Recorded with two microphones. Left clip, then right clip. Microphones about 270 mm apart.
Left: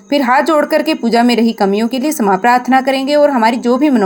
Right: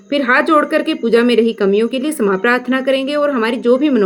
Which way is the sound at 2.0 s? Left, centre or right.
Centre.